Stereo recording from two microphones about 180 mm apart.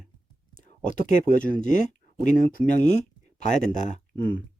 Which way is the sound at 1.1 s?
45° left (ahead or behind).